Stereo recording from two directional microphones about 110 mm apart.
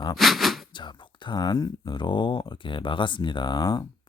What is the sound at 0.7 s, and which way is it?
Speech, 45° left (ahead or behind).